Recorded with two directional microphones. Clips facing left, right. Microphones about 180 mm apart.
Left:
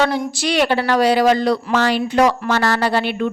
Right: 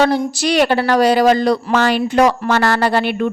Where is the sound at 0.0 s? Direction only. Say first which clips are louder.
Right 4 dB; 40° right (ahead or behind).